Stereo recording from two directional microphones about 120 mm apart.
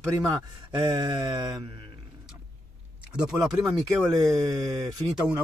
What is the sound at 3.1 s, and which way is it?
Speech, 5° right (ahead or behind).